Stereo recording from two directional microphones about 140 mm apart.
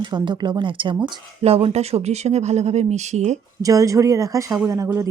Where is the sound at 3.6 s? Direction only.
25° right (ahead or behind).